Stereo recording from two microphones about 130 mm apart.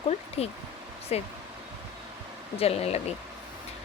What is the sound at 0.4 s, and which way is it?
Speech, 50° left (ahead or behind).